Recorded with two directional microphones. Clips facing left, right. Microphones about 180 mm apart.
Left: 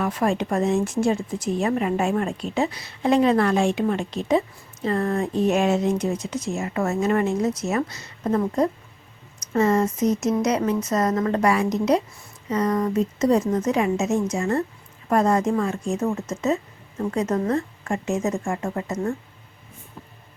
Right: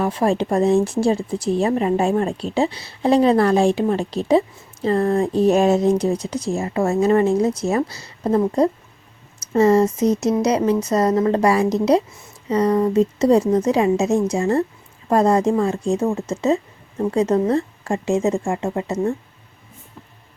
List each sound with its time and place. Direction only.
0.0 s speech: 30° right (ahead or behind)